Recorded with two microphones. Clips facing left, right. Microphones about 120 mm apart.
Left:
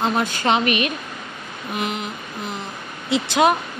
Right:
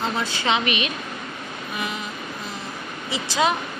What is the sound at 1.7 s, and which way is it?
Vehicle, 65° left (ahead or behind).